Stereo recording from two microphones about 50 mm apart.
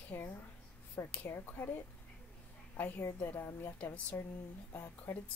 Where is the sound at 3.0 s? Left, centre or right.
Left.